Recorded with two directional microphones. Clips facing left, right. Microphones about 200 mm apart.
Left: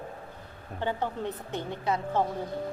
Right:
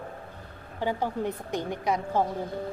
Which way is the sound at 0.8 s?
10° right (ahead or behind).